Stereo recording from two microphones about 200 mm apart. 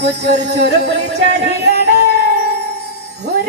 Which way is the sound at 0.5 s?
55° right (ahead or behind).